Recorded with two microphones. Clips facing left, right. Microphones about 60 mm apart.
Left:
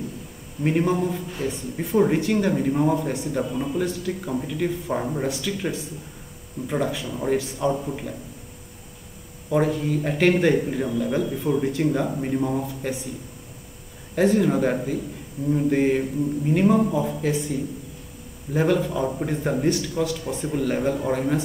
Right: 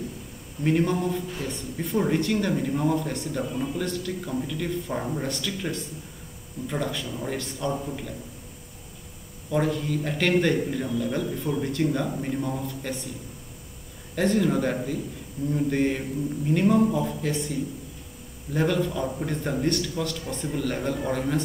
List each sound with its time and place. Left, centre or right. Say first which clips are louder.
0.7 s speech: left 2 dB; centre
9.5 s speech: left 3 dB; centre
14.1 s speech: left 3 dB; centre